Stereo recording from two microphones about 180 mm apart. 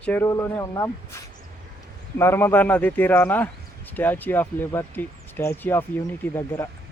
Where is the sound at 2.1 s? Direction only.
15° left (ahead or behind).